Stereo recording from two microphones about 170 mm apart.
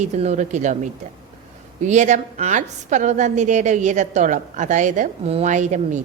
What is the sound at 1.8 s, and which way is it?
A woman's voice, 45° right (ahead or behind).